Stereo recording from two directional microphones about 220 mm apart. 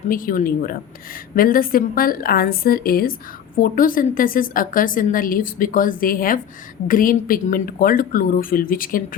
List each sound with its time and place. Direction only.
0.1 s a woman's voice: 40° left (ahead or behind)